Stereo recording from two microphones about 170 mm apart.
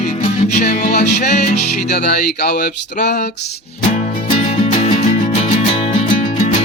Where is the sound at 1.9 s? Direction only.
65° left (ahead or behind).